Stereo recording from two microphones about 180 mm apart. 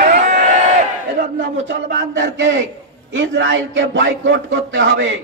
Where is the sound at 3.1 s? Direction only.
90° right.